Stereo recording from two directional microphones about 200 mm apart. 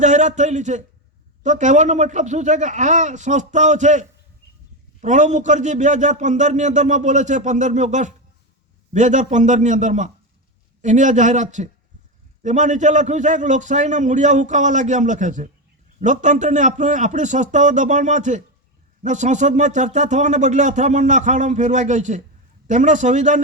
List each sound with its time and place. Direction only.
0.0 s speech: 35° right (ahead or behind)